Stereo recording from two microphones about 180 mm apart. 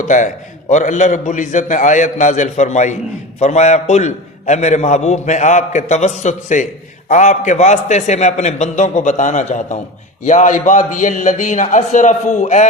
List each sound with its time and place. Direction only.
0.0 s a man's voice: 45° left (ahead or behind)